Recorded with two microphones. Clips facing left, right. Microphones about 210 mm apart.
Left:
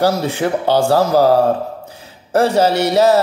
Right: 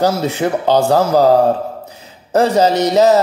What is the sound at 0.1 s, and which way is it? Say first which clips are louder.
Speech: right 1 dB; 15° left (ahead or behind).